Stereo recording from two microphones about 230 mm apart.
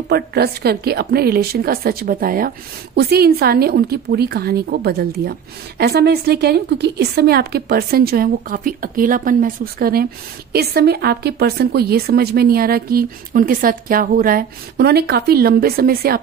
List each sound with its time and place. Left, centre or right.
0.1 s a woman's voice: right